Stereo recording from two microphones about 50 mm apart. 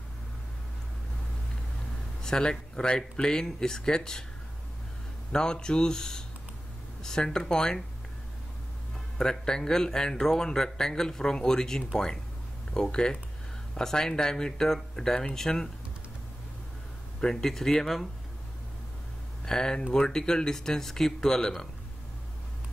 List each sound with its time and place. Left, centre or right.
2.2 s speech: centre
5.3 s speech: centre
9.2 s speech: centre
17.2 s speech: centre
19.4 s speech: centre